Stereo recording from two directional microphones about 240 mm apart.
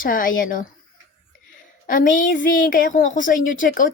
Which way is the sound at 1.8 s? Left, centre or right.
Left.